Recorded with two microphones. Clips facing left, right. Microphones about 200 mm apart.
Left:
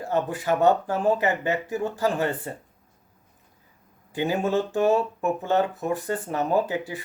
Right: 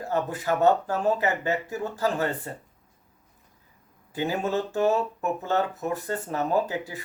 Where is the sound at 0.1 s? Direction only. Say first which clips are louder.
Left 2 dB; 20° left (ahead or behind).